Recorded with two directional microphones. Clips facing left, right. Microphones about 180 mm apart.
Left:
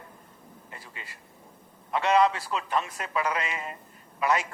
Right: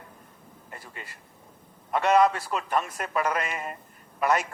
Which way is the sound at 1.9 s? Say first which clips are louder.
Right 2 dB; 45° right (ahead or behind).